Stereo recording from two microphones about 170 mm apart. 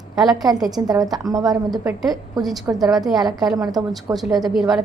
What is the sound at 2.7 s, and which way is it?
Speech, 15° right (ahead or behind).